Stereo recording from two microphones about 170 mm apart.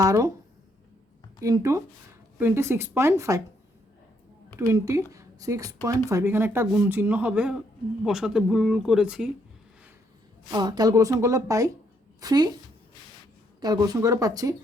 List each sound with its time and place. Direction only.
0.0 s a woman's voice: 20° right (ahead or behind)
1.4 s speech: 20° right (ahead or behind)
4.5 s a woman's voice: 20° right (ahead or behind)
10.5 s a woman's voice: 25° right (ahead or behind)
13.6 s a woman's voice: 25° right (ahead or behind)